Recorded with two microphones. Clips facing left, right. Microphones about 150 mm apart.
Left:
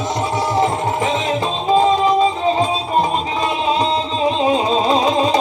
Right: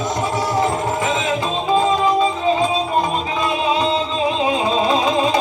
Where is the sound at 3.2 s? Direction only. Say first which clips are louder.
Left 1 dB; 35° left (ahead or behind).